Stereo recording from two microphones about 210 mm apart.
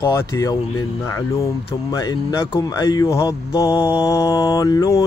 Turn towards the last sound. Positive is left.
turn(degrees=15)  # may be behind; listen again after turning